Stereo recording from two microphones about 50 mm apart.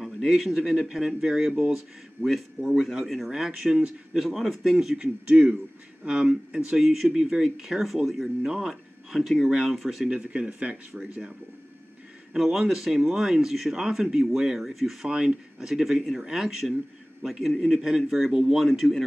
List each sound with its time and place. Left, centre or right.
0.4 s speech: centre
2.2 s speech: centre
4.2 s speech: centre
6.8 s speech: centre
10.2 s speech: right
12.4 s speech: centre
15.0 s speech: centre